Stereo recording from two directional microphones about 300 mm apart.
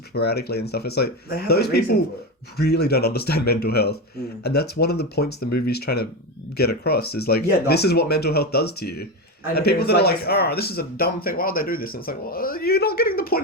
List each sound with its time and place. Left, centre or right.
0.1 s speech: left